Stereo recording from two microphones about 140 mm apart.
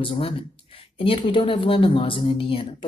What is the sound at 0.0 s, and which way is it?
Speech, 40° left (ahead or behind).